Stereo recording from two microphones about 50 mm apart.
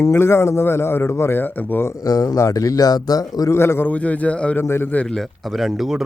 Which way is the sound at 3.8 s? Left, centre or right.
Left.